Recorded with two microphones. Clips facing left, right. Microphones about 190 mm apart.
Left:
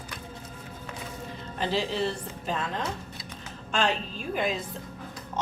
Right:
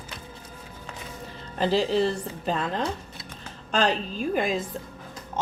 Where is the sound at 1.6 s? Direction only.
40° right (ahead or behind).